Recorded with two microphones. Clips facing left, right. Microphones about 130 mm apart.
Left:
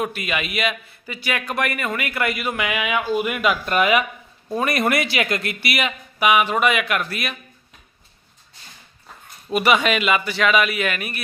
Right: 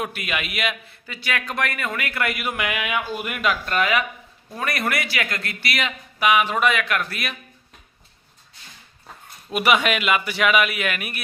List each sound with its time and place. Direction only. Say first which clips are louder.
0.0 s a man's voice: left 3 dB; centre (ahead or behind)
9.5 s a man's voice: left 2 dB; 5° right (ahead or behind)